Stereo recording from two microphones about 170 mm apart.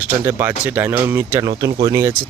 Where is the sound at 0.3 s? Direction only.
10° right (ahead or behind).